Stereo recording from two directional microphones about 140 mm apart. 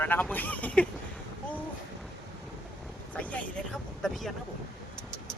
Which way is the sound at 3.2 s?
10° left (ahead or behind).